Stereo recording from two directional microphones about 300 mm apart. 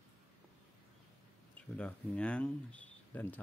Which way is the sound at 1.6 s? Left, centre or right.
Centre.